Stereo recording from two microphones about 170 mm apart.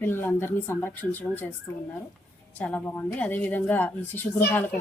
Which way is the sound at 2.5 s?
10° left (ahead or behind).